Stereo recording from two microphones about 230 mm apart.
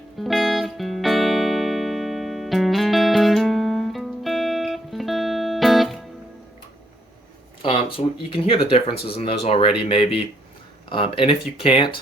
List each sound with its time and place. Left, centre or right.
0.2 s music: centre
7.6 s speech: left